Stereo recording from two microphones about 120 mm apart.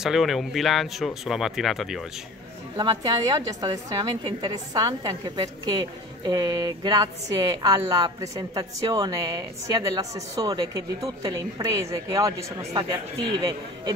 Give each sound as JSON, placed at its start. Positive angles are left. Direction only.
{"t": 0.0, "sound": "speech", "side_deg": 0}
{"t": 2.8, "sound": "a woman's voice", "side_deg": -30}
{"t": 4.2, "sound": "a woman's voice", "side_deg": -45}